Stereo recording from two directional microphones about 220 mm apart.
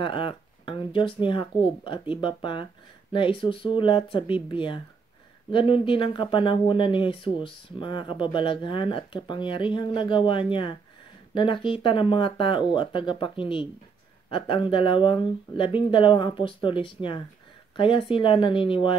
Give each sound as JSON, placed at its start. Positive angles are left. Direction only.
{"t": 0.0, "sound": "speech", "side_deg": 25}